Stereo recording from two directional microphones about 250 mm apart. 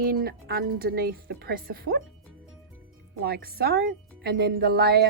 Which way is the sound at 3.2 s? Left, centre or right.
Right.